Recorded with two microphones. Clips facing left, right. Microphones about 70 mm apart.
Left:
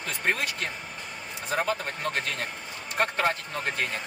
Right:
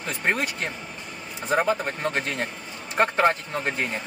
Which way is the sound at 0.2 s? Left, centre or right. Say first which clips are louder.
Right 3 dB; right.